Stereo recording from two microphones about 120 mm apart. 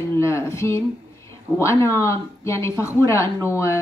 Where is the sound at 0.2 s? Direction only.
20° left (ahead or behind).